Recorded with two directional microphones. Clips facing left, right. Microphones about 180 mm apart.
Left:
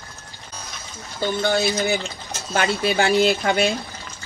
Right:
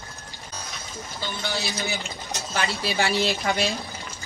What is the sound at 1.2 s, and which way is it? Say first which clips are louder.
Speech: left 10 dB; 55° left (ahead or behind).